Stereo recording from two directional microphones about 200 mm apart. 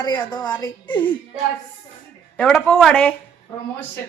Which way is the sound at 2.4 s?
5° left (ahead or behind).